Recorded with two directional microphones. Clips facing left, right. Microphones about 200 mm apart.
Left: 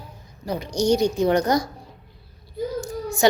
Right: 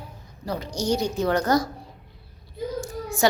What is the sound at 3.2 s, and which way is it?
Speech, 20° left (ahead or behind).